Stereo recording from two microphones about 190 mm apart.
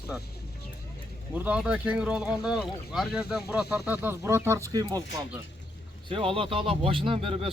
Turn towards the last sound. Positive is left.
turn(degrees=-30)  # may be behind; listen again after turning